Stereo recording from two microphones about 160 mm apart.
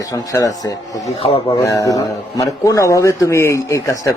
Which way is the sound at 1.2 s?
35° left (ahead or behind).